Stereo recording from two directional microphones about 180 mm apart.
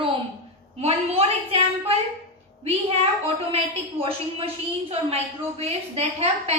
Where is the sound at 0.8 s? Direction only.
35° right (ahead or behind).